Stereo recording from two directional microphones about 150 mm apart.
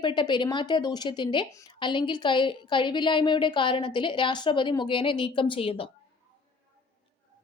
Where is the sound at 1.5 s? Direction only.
20° left (ahead or behind).